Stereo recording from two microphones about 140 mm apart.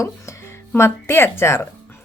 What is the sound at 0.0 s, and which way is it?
Speech, 20° left (ahead or behind).